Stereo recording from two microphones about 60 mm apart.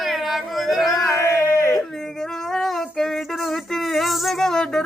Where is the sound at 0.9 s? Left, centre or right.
Left.